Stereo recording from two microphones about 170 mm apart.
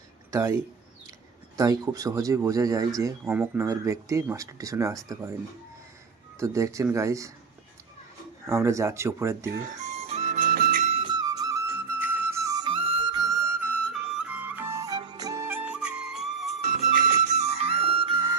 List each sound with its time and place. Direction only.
0.3 s speech: 15° right (ahead or behind)
6.4 s speech: 20° right (ahead or behind)
8.4 s speech: 15° right (ahead or behind)
9.7 s music: 40° right (ahead or behind)
10.9 s music: 25° right (ahead or behind); by 16.5 s centre (ahead or behind)
17.2 s music: 40° right (ahead or behind)